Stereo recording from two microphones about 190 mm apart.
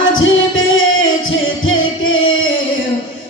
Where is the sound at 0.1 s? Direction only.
90° left.